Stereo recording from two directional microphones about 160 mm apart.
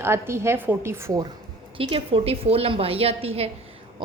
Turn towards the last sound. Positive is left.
turn(degrees=-40)  # may be behind; listen again after turning